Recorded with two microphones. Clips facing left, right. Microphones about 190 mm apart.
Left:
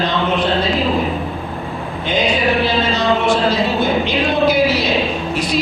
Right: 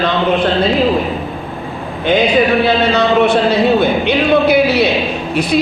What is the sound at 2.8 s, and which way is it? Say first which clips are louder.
Speech: right 5 dB; 65° right (ahead or behind).